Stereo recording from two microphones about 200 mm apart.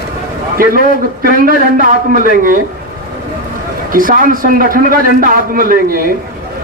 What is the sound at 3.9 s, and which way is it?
A man's voice, 45° right (ahead or behind).